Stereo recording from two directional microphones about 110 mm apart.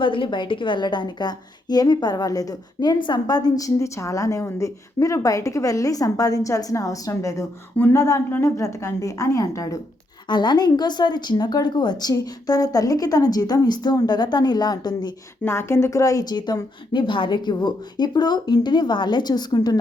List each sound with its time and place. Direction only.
0.0 s a woman's voice: 50° left (ahead or behind); by 9.8 s 30° left (ahead or behind)
10.2 s a woman's voice: 45° left (ahead or behind)
15.4 s a woman's voice: 25° left (ahead or behind); by 19.8 s 40° left (ahead or behind)